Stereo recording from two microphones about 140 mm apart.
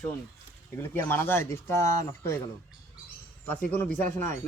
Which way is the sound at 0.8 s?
15° left (ahead or behind).